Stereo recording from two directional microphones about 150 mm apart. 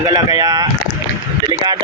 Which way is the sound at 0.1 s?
25° right (ahead or behind).